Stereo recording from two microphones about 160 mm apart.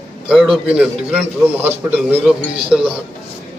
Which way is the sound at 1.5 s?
10° right (ahead or behind).